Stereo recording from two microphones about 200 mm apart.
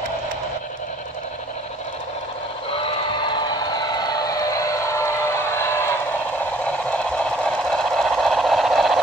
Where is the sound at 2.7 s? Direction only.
25° left (ahead or behind).